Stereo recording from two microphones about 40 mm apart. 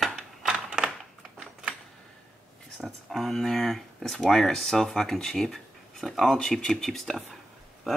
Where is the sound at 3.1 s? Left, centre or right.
Centre.